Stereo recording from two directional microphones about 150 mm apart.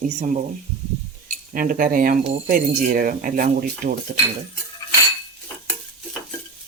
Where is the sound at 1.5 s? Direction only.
65° right (ahead or behind).